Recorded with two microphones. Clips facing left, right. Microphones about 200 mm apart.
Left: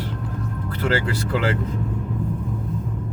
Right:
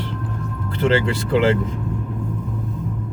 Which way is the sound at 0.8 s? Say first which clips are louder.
Right 4 dB; 25° right (ahead or behind).